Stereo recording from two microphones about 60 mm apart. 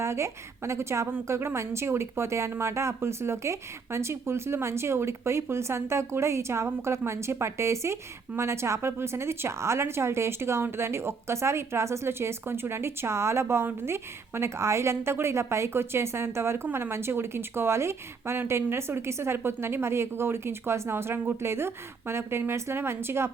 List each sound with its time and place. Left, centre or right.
0.0 s speech: right